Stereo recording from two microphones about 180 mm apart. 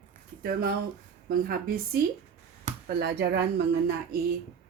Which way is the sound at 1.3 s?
55° right (ahead or behind).